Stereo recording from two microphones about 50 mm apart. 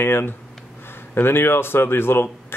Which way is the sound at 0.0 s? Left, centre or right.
Left.